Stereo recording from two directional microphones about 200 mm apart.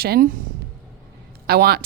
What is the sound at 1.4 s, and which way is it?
Speech, 50° right (ahead or behind).